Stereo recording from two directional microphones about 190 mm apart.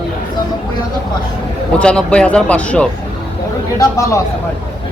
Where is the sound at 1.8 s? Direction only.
5° left (ahead or behind).